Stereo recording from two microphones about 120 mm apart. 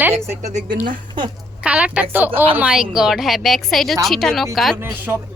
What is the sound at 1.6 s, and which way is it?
Speech, 10° right (ahead or behind).